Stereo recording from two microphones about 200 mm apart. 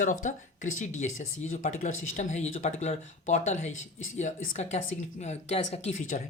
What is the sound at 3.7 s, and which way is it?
Speech, 80° left.